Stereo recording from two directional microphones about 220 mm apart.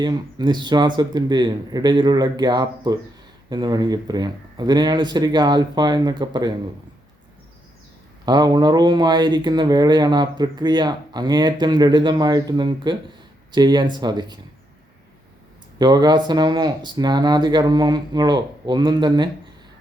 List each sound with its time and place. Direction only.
0.0 s speech: 20° right (ahead or behind)
8.2 s speech: 20° right (ahead or behind)
15.8 s speech: 20° right (ahead or behind)